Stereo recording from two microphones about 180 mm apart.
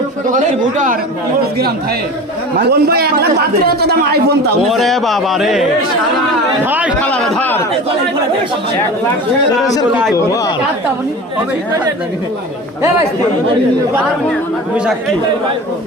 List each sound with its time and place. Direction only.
0.3 s a man's voice: 45° right (ahead or behind)
2.6 s speech: 65° right (ahead or behind)
4.7 s speech: centre (ahead or behind)
6.7 s a man's voice: 10° right (ahead or behind)
7.0 s a man's voice: 5° left (ahead or behind)